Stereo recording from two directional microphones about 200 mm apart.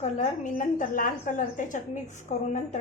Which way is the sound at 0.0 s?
35° left (ahead or behind).